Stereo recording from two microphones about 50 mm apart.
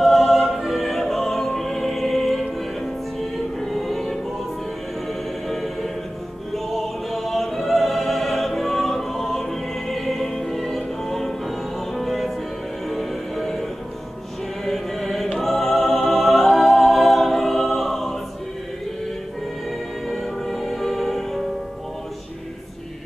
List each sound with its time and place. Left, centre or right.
0.0 s music: centre
5.5 s music: centre
6.5 s opera: centre
12.8 s music: centre
20.1 s music: centre